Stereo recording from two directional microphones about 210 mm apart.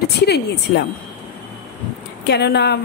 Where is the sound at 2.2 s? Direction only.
55° left (ahead or behind).